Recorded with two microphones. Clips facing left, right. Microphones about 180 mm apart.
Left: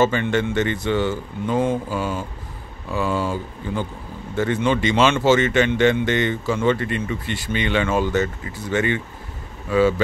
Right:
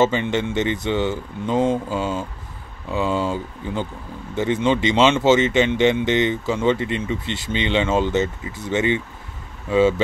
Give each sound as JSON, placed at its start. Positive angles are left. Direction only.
{"t": 0.0, "sound": "speech", "side_deg": -20}